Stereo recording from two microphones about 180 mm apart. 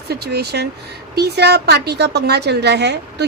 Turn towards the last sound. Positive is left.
turn(degrees=-70)  # may be behind; listen again after turning